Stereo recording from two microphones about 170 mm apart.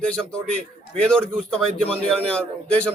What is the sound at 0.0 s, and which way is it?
A man's voice, 5° left (ahead or behind).